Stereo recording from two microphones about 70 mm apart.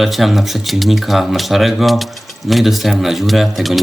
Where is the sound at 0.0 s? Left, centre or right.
Centre.